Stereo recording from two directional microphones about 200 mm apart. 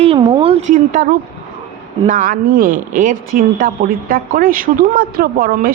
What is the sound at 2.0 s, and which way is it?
A woman's voice, 45° right (ahead or behind).